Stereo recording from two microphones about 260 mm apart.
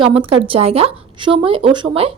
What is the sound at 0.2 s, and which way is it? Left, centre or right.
Speech, centre.